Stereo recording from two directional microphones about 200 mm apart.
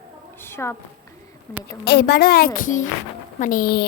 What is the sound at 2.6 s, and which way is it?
A child's voice, 40° left (ahead or behind).